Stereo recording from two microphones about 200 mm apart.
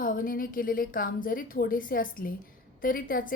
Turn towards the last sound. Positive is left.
turn(degrees=45)  # may be behind; listen again after turning